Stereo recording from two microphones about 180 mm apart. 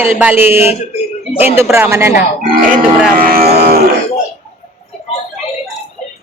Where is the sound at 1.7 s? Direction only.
15° right (ahead or behind).